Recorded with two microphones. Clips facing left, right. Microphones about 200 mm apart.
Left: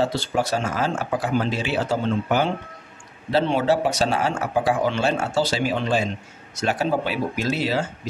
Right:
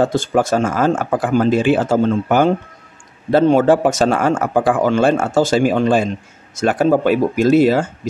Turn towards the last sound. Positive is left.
turn(degrees=-50)  # may be behind; listen again after turning